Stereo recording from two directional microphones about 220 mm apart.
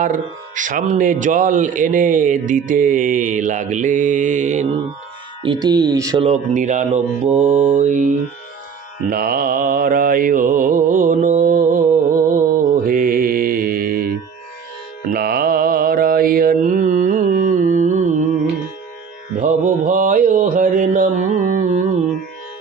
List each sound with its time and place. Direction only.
0.0 s speech: 35° right (ahead or behind); by 6.2 s 15° right (ahead or behind)
6.2 s speech: 35° right (ahead or behind)
9.1 s speech: 40° right (ahead or behind)
11.1 s mantra: 35° right (ahead or behind)
19.4 s mantra: 35° right (ahead or behind)